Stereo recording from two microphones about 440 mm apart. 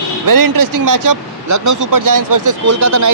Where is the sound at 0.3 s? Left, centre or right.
Right.